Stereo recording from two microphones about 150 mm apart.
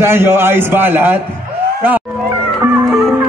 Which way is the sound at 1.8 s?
10° right (ahead or behind).